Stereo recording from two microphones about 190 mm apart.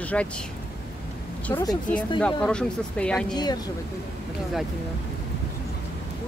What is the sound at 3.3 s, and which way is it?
Speech, 20° left (ahead or behind).